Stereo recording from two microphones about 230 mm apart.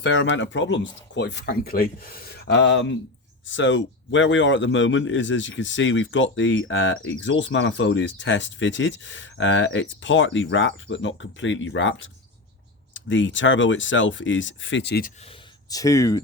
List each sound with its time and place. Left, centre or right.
0.0 s a man's voice: left
15.2 s speech: centre